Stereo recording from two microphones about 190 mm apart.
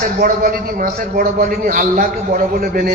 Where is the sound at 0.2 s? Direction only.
50° right (ahead or behind).